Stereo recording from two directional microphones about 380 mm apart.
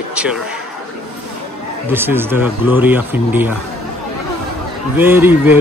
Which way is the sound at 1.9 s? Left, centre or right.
Centre.